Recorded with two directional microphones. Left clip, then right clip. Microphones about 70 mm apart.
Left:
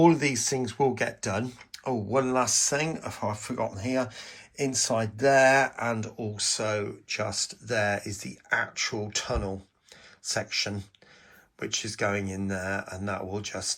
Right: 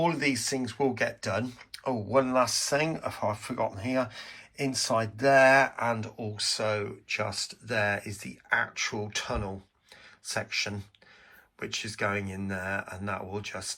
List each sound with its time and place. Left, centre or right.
0.0 s speech: left
0.8 s speech: left
11.6 s speech: left